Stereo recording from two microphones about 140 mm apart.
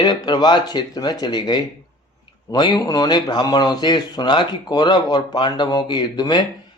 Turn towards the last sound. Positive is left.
turn(degrees=30)  # may be behind; listen again after turning